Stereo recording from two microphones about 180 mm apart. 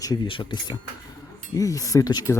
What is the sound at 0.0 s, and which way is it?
Speech, 25° left (ahead or behind).